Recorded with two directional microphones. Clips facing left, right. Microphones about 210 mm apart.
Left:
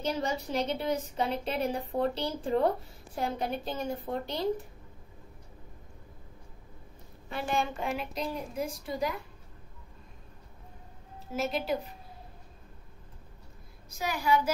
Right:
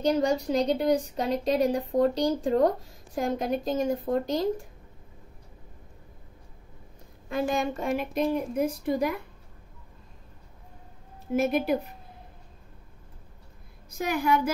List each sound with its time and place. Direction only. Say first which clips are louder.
0.0 s a woman's voice: right 8 dB; 40° right (ahead or behind)
7.2 s a woman's voice: right 5 dB; 45° right (ahead or behind)
11.3 s a woman's voice: right 6 dB; 55° right (ahead or behind)
13.8 s a woman's voice: right 4 dB; 55° right (ahead or behind)